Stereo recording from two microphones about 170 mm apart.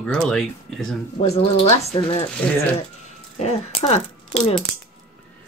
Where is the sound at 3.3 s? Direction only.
40° left (ahead or behind).